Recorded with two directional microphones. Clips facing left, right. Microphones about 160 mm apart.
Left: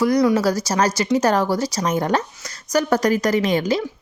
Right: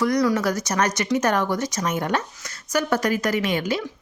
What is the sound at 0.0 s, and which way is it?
Speech, 25° left (ahead or behind).